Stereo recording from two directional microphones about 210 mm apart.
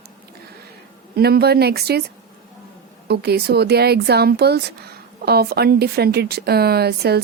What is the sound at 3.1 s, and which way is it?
Speech, 50° right (ahead or behind).